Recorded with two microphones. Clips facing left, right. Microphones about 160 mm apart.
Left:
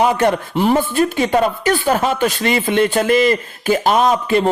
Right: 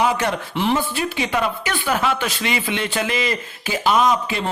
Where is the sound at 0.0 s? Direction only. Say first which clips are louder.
Left 5 dB; 50° left (ahead or behind).